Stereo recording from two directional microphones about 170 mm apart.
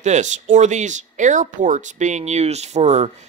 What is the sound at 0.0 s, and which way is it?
Speech, 45° right (ahead or behind).